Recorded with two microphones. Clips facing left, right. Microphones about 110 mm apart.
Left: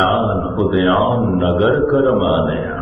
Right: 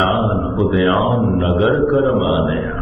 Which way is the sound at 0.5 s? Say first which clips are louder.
Left 1 dB; 15° left (ahead or behind).